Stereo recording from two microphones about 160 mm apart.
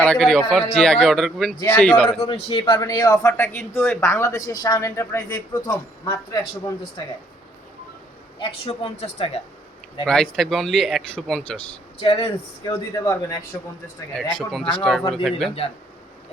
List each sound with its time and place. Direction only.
0.0 s speech: 5° left (ahead or behind)
2.1 s a woman's voice: 40° left (ahead or behind)
2.7 s speech: 20° left (ahead or behind)
8.4 s a woman's voice: 35° left (ahead or behind)
10.1 s speech: 5° left (ahead or behind)
11.9 s a woman's voice: 35° left (ahead or behind)
12.7 s speech: 20° left (ahead or behind)
14.3 s speech: 5° left (ahead or behind)